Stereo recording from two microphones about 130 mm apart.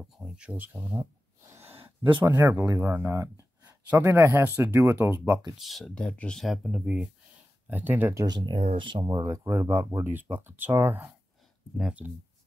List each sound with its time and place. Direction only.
0.0 s speech: 5° right (ahead or behind)
1.5 s a sound: 15° right (ahead or behind)
1.8 s a sound: 40° right (ahead or behind)
2.2 s speech: 20° right (ahead or behind)
5.6 s speech: centre (ahead or behind); by 8.4 s 25° right (ahead or behind)
8.4 s speech: 35° right (ahead or behind); by 12.1 s 5° right (ahead or behind)